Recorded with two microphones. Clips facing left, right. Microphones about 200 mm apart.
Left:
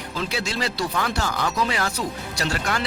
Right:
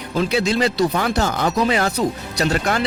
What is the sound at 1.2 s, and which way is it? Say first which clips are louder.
Speech: right 5 dB; 40° right (ahead or behind).